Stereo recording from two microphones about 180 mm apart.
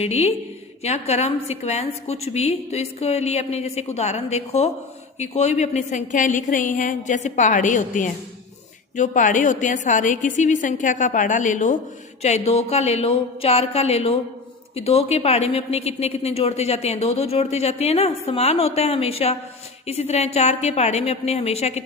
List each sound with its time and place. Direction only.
0.0 s a woman's voice: 35° left (ahead or behind)